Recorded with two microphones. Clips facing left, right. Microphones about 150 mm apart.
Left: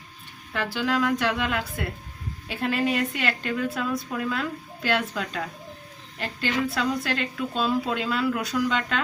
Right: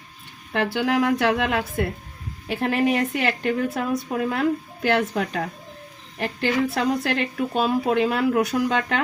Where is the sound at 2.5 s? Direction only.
55° right (ahead or behind).